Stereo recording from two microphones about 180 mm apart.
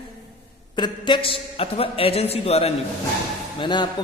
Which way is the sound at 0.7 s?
25° left (ahead or behind).